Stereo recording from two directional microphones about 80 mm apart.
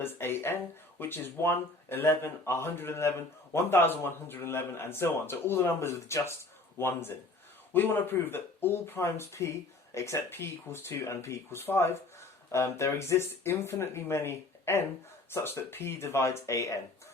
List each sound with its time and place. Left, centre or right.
0.0 s speech: left